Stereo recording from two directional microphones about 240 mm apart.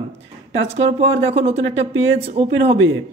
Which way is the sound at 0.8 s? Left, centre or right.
Right.